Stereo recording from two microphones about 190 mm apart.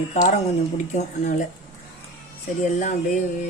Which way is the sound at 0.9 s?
40° left (ahead or behind).